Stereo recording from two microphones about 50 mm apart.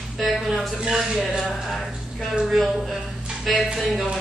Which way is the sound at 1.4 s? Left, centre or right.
Centre.